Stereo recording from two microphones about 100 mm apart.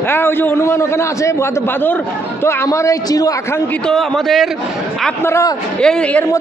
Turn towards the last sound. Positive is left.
turn(degrees=10)  # may be behind; listen again after turning